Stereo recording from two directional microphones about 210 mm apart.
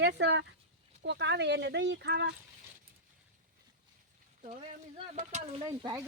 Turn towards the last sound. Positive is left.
turn(degrees=-20)  # may be behind; listen again after turning